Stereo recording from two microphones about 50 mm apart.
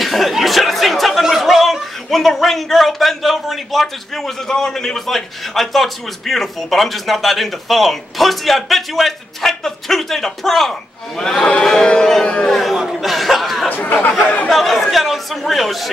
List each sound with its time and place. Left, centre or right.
0.0 s speech: centre
11.6 s a sound: centre
13.7 s speech: left
14.5 s speech: centre